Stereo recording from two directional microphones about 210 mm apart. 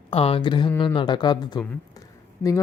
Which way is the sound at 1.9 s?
15° left (ahead or behind).